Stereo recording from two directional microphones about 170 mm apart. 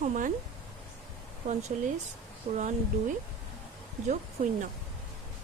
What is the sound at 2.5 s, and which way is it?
Speech, 45° right (ahead or behind).